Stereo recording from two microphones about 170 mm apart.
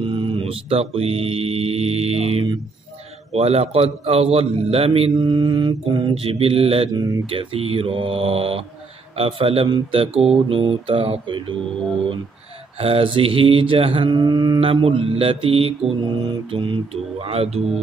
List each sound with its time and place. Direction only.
0.0 s a man's voice: 30° right (ahead or behind)
12.7 s a man's voice: 35° right (ahead or behind)